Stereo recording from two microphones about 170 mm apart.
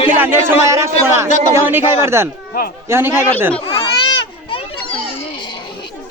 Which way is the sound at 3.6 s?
35° left (ahead or behind).